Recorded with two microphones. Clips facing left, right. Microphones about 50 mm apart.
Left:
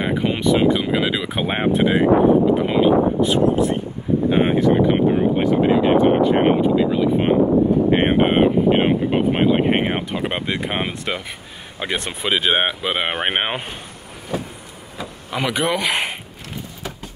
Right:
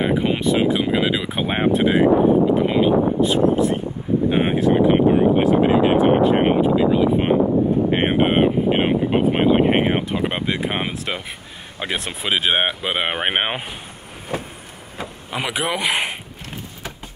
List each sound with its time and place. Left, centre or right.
0.0 s speech: centre
14.3 s vehicle: right
15.3 s speech: centre